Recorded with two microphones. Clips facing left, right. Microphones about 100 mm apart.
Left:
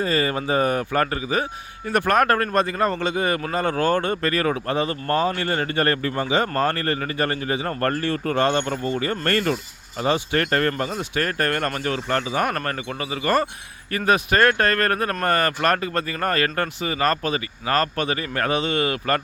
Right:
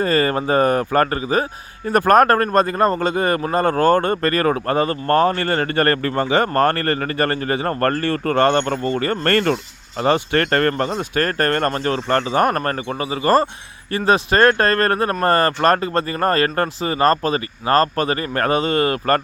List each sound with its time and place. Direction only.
0.0 s speech: 50° right (ahead or behind)